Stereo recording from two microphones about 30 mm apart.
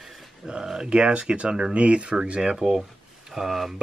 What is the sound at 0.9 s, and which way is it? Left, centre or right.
Speech, right.